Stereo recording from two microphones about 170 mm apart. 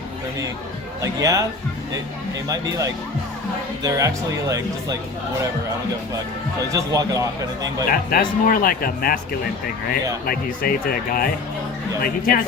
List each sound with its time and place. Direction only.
1.0 s speech: 20° right (ahead or behind)
3.8 s speech: 20° right (ahead or behind)
6.7 s speech: 20° right (ahead or behind)
7.9 s speech: 55° left (ahead or behind)
10.2 s speech: 60° left (ahead or behind)